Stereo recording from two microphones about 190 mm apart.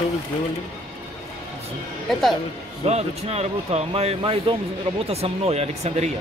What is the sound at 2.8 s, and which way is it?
Speech, 35° right (ahead or behind).